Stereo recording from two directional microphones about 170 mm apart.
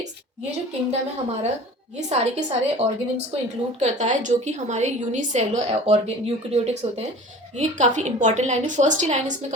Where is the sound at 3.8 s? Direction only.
45° right (ahead or behind).